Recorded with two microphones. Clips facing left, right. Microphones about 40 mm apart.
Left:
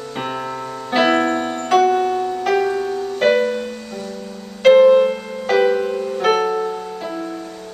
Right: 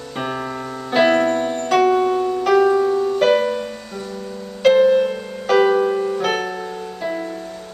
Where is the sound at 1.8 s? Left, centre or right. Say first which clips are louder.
Right 1 dB; centre.